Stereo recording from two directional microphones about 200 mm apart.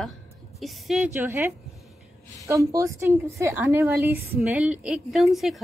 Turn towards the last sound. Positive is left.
turn(degrees=0)  # may be behind; listen again after turning